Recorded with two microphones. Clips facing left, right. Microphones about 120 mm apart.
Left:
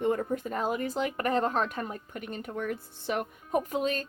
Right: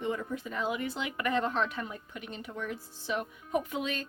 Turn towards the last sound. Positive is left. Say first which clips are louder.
# left 4 dB
turn(degrees=40)  # may be behind; listen again after turning